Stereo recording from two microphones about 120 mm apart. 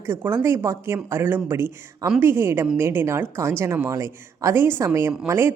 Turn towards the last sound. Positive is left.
turn(degrees=-20)  # may be behind; listen again after turning